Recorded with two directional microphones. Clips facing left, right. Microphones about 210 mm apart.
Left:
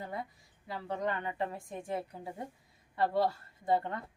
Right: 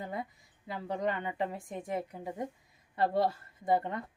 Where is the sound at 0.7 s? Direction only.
20° right (ahead or behind).